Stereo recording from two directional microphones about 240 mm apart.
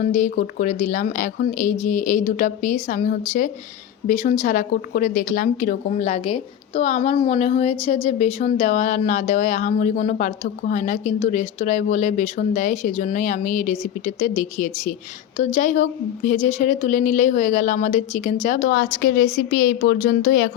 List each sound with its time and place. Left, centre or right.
0.0 s speech: left